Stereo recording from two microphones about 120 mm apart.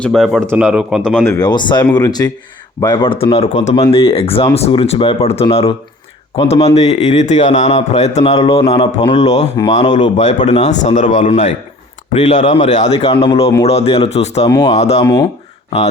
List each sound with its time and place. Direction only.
0.0 s speech: 5° left (ahead or behind)
0.6 s speech: 5° right (ahead or behind)
1.4 s speech: 35° left (ahead or behind); by 3.5 s 55° left (ahead or behind)
3.5 s speech: 75° left (ahead or behind)
3.8 s speech: 50° left (ahead or behind)
9.1 s a man's voice: 65° left (ahead or behind); by 11.4 s 80° left
12.1 s speech: 50° left (ahead or behind)